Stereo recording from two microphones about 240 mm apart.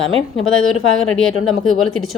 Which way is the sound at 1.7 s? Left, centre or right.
Centre.